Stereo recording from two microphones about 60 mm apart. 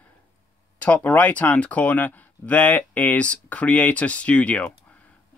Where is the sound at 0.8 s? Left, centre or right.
Left.